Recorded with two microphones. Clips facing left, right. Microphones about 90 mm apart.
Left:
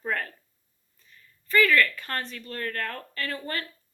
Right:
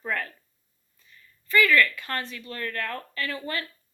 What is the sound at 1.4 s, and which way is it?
Speech, 40° left (ahead or behind).